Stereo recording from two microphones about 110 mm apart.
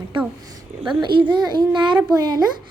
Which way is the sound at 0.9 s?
45° right (ahead or behind).